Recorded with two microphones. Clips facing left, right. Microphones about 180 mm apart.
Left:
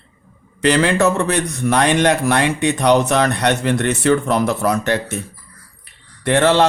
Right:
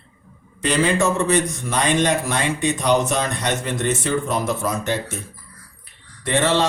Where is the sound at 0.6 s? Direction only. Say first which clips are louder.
Left 4 dB; 70° left (ahead or behind).